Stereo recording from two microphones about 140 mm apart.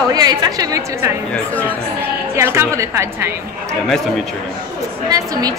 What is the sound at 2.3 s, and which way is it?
Speech, 20° right (ahead or behind).